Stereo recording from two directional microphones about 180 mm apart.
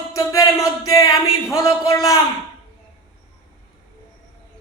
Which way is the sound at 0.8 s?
20° left (ahead or behind).